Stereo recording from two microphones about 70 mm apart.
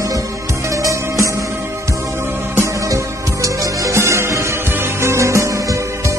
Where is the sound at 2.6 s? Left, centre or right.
Right.